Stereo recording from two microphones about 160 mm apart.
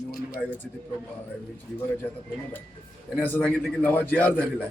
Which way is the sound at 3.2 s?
10° left (ahead or behind).